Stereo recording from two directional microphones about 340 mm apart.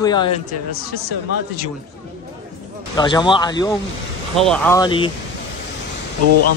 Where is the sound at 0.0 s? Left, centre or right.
Centre.